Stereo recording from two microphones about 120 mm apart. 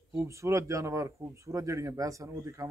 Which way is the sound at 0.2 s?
25° right (ahead or behind).